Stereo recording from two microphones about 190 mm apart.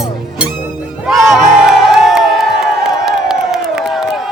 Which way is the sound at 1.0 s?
Centre (ahead or behind).